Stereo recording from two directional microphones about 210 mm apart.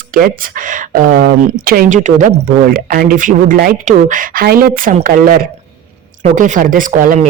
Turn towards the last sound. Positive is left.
turn(degrees=-40)  # may be behind; listen again after turning